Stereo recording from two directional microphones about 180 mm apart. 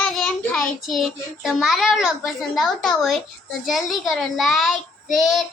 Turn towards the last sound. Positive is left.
turn(degrees=0)  # may be behind; listen again after turning